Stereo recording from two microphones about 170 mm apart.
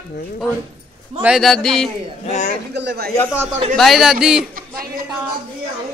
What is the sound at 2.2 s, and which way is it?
Speech, 45° left (ahead or behind).